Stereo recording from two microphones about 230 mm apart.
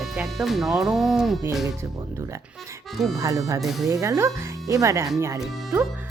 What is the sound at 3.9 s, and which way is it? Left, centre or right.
Speech, centre.